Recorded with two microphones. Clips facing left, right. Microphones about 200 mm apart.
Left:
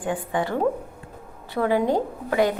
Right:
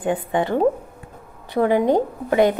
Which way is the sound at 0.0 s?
20° right (ahead or behind).